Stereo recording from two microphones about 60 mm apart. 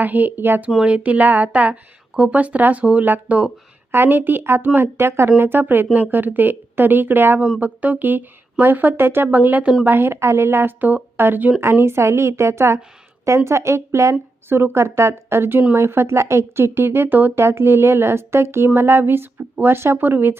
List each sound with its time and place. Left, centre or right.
0.0 s a woman's voice: right
0.9 s a woman's voice: right
3.9 s speech: right
11.6 s speech: right
17.4 s speech: right
18.7 s speech: right